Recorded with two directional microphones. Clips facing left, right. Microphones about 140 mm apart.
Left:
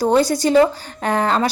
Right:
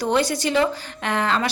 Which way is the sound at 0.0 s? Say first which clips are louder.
Left 5 dB; 40° left (ahead or behind).